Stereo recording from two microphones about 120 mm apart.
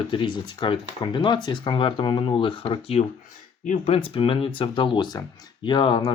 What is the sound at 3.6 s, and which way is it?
Speech, 80° left.